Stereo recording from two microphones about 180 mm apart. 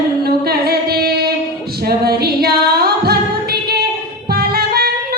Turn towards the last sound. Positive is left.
turn(degrees=-60)  # may be behind; listen again after turning